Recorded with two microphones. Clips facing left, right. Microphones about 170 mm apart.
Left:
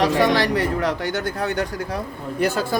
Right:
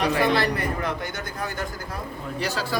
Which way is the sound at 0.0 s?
80° left.